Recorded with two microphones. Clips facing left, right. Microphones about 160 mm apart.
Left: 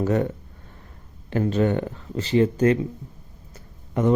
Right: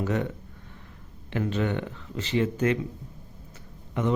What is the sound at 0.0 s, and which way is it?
Speech, 40° left (ahead or behind).